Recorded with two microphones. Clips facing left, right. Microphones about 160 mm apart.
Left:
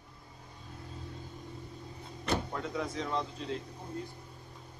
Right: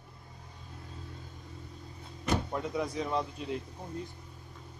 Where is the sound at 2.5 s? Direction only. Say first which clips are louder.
Right 3 dB; 15° right (ahead or behind).